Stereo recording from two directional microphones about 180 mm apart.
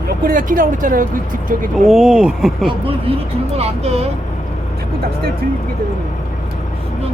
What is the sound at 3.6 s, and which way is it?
Speech, 35° right (ahead or behind).